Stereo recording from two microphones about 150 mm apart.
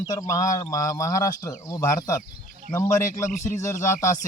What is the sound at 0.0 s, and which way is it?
Speech, 25° left (ahead or behind).